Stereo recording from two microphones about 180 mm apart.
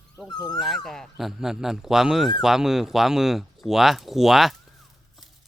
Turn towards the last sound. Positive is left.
turn(degrees=0)  # may be behind; listen again after turning